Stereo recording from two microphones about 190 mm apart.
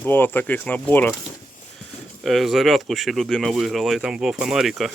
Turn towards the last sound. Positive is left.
turn(degrees=0)  # may be behind; listen again after turning